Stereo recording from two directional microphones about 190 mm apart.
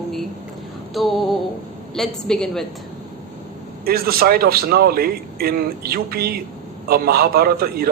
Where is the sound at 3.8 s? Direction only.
55° right (ahead or behind).